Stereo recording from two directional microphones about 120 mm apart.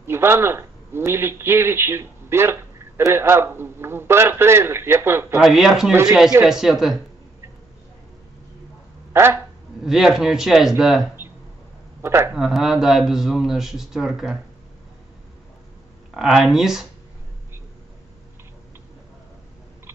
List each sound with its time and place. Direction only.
0.0 s a man's voice: 20° right (ahead or behind)
5.4 s speech: 5° right (ahead or behind)
9.1 s speech: 20° right (ahead or behind)
9.8 s speech: 5° right (ahead or behind)
12.0 s a man's voice: 20° right (ahead or behind)
12.4 s speech: centre (ahead or behind)
16.1 s speech: 5° right (ahead or behind)